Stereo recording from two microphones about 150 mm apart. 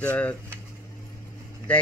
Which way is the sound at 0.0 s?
10° left (ahead or behind).